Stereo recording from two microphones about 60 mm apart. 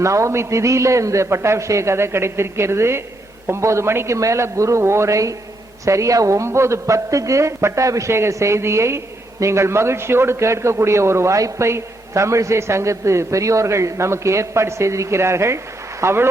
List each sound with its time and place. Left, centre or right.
0.0 s a man's voice: right